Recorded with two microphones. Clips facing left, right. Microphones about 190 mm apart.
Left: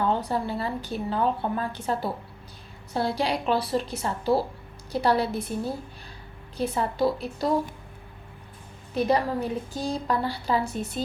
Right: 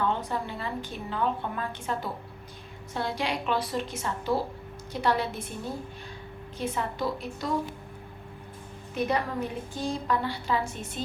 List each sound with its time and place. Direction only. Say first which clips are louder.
0.0 s a woman's voice: left 4 dB; 35° left (ahead or behind)
6.6 s a woman's voice: left 6 dB; 35° left (ahead or behind)
9.0 s a woman's voice: left 5 dB; 35° left (ahead or behind)